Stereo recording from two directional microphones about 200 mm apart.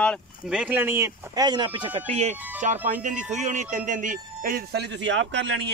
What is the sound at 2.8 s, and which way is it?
Speech, 40° right (ahead or behind).